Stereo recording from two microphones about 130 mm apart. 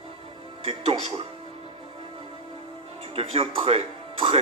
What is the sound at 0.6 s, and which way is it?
Speech, 50° right (ahead or behind).